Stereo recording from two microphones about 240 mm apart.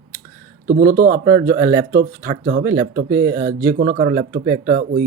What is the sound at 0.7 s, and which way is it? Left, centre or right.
Speech, right.